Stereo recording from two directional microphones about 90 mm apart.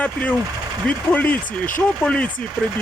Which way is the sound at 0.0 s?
15° left (ahead or behind).